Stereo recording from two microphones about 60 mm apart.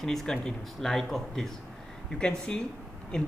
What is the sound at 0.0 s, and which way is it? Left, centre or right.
Speech, centre.